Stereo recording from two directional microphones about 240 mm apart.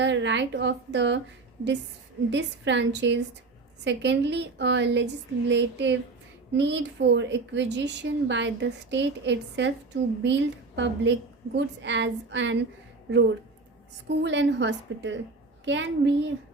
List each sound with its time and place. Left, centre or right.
0.0 s a woman's voice: right
2.3 s a woman's voice: right
14.2 s a woman's voice: right